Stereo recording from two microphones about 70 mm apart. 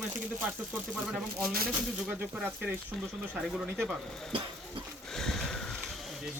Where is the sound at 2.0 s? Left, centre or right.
Centre.